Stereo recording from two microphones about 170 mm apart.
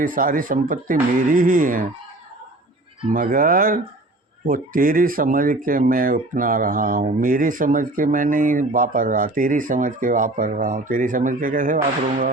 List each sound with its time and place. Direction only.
0.0 s speech: 55° right (ahead or behind)
3.1 s speech: 55° right (ahead or behind)